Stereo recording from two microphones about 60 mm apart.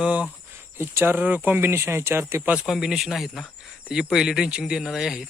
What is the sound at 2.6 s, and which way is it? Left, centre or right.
Speech, centre.